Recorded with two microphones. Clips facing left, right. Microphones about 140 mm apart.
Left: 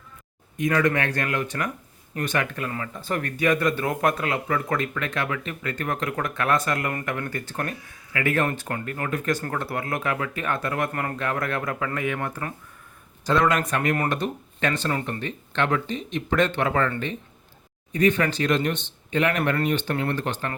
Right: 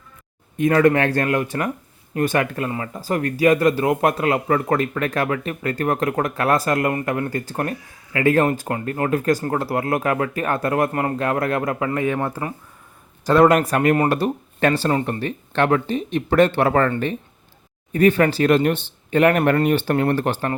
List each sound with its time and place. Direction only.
0.9 s speech: 50° right (ahead or behind); by 1.7 s 30° right (ahead or behind)
2.2 s speech: 40° right (ahead or behind)
2.6 s speech: 30° right (ahead or behind)
17.9 s speech: 50° right (ahead or behind)